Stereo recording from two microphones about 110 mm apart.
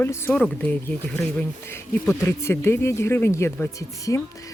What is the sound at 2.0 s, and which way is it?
Speech, 20° left (ahead or behind).